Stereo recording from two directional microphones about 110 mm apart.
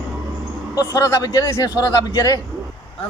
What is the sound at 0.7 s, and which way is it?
A man's voice, 30° left (ahead or behind).